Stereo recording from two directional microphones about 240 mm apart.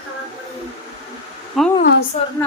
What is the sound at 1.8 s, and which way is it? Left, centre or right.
Speech, left.